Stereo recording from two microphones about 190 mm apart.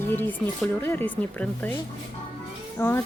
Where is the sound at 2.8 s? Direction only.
10° left (ahead or behind).